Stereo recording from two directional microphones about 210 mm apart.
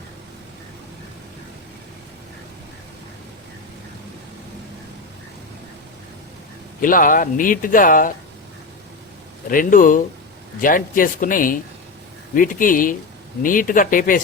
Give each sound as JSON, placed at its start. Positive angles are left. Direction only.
{"t": 6.8, "sound": "speech", "side_deg": 40}
{"t": 9.5, "sound": "speech", "side_deg": 40}